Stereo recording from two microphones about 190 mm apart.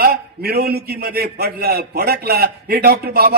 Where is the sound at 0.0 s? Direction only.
55° right (ahead or behind).